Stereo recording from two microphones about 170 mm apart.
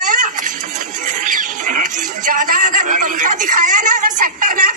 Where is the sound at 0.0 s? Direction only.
50° right (ahead or behind).